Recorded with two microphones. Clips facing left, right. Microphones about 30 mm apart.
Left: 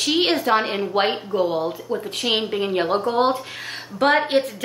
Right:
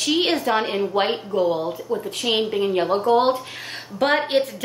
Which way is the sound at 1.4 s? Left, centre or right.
Left.